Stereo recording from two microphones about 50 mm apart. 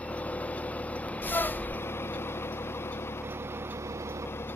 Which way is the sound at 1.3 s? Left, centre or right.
Left.